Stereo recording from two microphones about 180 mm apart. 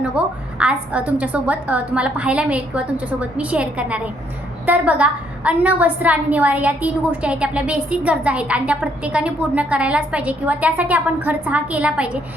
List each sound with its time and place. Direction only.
0.2 s a woman's voice: 5° right (ahead or behind)